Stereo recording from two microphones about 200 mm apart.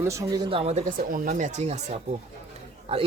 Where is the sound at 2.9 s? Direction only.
30° right (ahead or behind).